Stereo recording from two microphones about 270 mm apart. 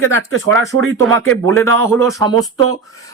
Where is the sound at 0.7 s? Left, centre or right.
Right.